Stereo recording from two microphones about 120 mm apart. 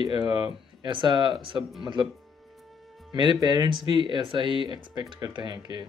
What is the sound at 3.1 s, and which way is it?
Speech, 40° right (ahead or behind).